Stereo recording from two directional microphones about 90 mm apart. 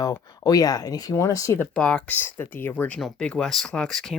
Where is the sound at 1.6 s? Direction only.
10° left (ahead or behind).